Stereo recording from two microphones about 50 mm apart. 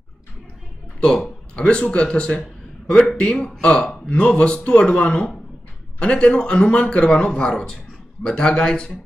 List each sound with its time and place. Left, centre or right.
1.5 s a man's voice: centre